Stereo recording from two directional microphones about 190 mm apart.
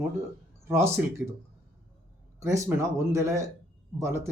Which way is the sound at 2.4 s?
15° right (ahead or behind).